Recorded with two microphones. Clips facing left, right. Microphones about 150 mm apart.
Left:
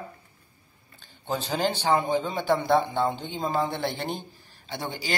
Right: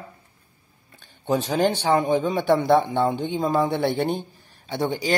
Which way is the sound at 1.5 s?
60° right (ahead or behind).